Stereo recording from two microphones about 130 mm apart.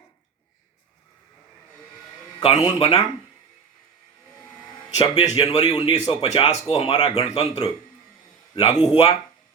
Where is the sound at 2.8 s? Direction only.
50° left (ahead or behind).